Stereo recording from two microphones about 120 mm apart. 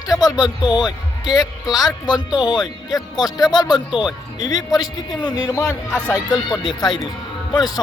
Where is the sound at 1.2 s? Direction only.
30° left (ahead or behind).